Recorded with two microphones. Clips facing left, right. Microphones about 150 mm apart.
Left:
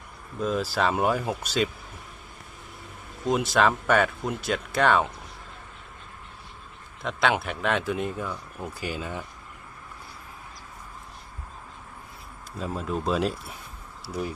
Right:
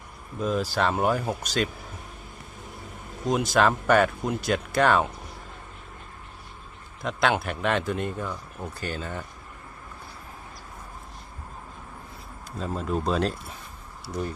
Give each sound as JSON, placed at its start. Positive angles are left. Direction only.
{"t": 0.3, "sound": "speech", "side_deg": 0}
{"t": 3.2, "sound": "speech", "side_deg": 0}
{"t": 7.0, "sound": "speech", "side_deg": 0}
{"t": 12.5, "sound": "speech", "side_deg": 5}